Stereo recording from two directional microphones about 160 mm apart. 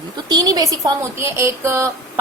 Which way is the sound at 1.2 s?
15° right (ahead or behind).